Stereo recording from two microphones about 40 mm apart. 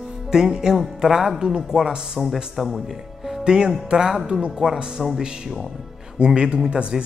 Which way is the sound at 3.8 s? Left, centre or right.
Centre.